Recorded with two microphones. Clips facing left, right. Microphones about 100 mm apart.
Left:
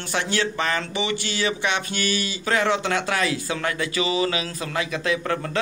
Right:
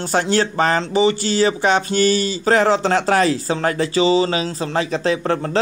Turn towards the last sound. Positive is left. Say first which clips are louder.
# right 5 dB
turn(degrees=-35)  # may be behind; listen again after turning